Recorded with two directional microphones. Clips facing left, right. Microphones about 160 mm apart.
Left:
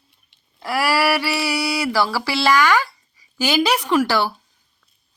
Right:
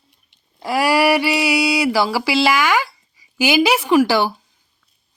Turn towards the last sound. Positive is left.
turn(degrees=-15)  # may be behind; listen again after turning